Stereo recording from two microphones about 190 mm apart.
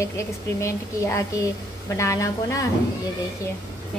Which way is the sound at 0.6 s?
15° left (ahead or behind).